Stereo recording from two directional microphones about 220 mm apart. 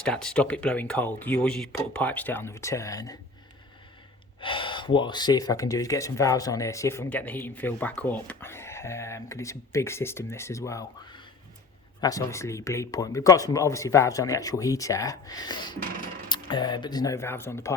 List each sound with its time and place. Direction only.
0.0 s speech: 5° left (ahead or behind)
4.4 s speech: 25° left (ahead or behind)